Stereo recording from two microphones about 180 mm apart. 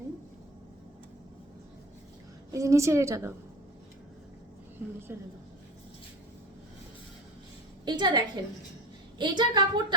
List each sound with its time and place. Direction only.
2.5 s a woman's voice: 15° right (ahead or behind)
7.9 s a woman's voice: 25° right (ahead or behind)